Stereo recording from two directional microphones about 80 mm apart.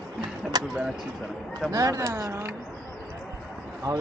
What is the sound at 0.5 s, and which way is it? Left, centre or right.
Speech, right.